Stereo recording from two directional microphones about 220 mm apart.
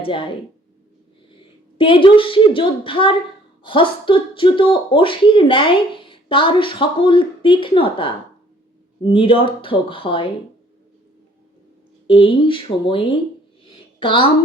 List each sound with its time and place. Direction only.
0.0 s speech: 25° left (ahead or behind)
1.8 s speech: 25° left (ahead or behind)
9.1 s speech: 25° left (ahead or behind)
12.0 s speech: 25° left (ahead or behind)